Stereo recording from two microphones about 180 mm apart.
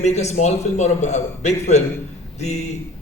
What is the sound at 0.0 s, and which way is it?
A man's voice, 40° left (ahead or behind).